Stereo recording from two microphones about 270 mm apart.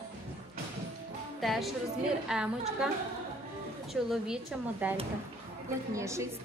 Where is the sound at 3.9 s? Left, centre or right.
Centre.